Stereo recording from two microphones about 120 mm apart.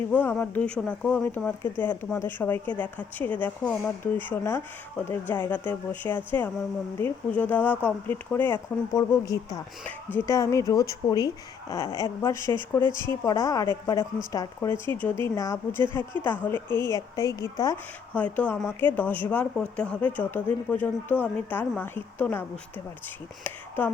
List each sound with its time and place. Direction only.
0.1 s speech: 15° left (ahead or behind)
8.9 s a woman's voice: 30° left (ahead or behind)
9.8 s a woman's voice: 15° left (ahead or behind)
18.1 s speech: 10° left (ahead or behind)